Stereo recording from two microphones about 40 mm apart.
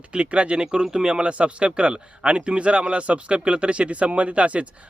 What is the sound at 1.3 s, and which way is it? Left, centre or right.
Speech, right.